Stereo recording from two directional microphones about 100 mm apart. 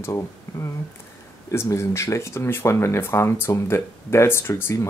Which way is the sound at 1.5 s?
30° left (ahead or behind).